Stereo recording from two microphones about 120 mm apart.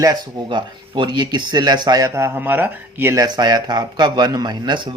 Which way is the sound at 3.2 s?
35° right (ahead or behind).